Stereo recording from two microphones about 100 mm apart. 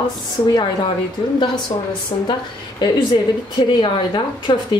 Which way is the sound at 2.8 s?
50° left (ahead or behind).